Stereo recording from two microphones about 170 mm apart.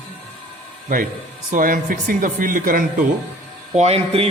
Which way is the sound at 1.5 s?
55° right (ahead or behind).